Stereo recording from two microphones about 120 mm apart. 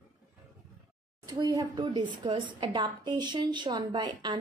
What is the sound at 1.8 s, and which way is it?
A woman's voice, 40° right (ahead or behind).